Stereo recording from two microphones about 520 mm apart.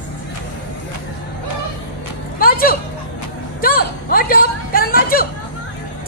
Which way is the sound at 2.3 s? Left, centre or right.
Centre.